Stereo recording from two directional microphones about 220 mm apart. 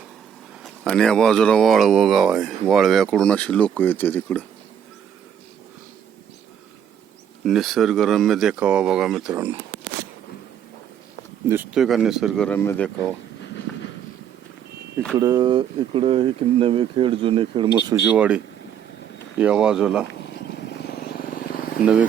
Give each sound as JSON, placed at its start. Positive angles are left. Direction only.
{"t": 0.6, "sound": "speech", "side_deg": 0}
{"t": 7.4, "sound": "speech", "side_deg": 0}
{"t": 11.4, "sound": "speech", "side_deg": -10}
{"t": 15.1, "sound": "speech", "side_deg": -15}
{"t": 18.2, "sound": "speech", "side_deg": -5}
{"t": 20.3, "sound": "vehicle", "side_deg": 50}